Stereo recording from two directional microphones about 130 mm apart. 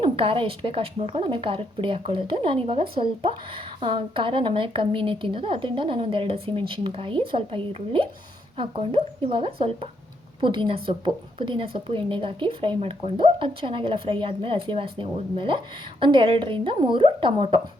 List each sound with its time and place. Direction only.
0.0 s a woman's voice: 40° right (ahead or behind)